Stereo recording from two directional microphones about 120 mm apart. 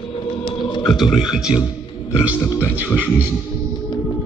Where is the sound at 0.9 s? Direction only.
Centre (ahead or behind).